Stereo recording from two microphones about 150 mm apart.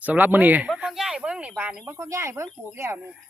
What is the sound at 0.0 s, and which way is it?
Speech, 10° right (ahead or behind).